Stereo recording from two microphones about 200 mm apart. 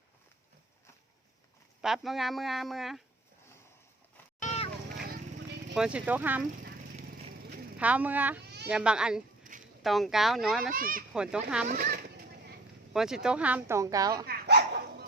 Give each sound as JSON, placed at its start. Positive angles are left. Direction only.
{"t": 1.8, "sound": "speech", "side_deg": 0}
{"t": 4.4, "sound": "a sound", "side_deg": 35}
{"t": 5.7, "sound": "speech", "side_deg": -5}
{"t": 7.8, "sound": "speech", "side_deg": -5}
{"t": 9.4, "sound": "a sound", "side_deg": -40}
{"t": 9.8, "sound": "speech", "side_deg": 0}
{"t": 10.8, "sound": "a child's voice", "side_deg": -45}
{"t": 11.1, "sound": "speech", "side_deg": -5}
{"t": 11.7, "sound": "a child's voice", "side_deg": -45}
{"t": 12.9, "sound": "speech", "side_deg": -5}
{"t": 14.3, "sound": "dog", "side_deg": -55}